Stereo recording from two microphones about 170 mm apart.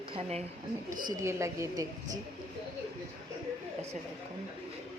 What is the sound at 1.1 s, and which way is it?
Speech, 20° right (ahead or behind).